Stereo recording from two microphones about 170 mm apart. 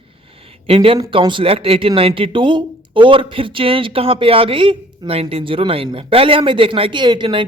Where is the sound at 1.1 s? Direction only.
30° right (ahead or behind).